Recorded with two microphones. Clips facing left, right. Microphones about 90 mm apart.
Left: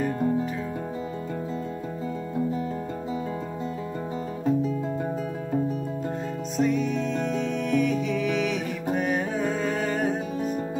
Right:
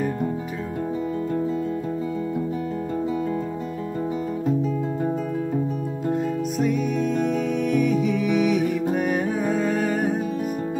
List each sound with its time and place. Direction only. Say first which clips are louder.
6.6 s music: even; 10° right (ahead or behind)